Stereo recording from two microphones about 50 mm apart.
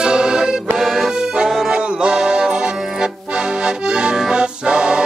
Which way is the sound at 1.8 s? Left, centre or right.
Right.